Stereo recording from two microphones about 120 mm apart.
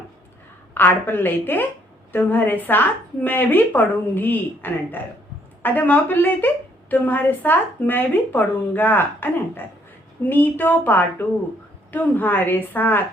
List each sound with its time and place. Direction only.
0.7 s a woman's voice: 15° left (ahead or behind)